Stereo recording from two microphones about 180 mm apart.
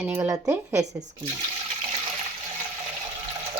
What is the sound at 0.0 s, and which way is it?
Speech, 15° right (ahead or behind).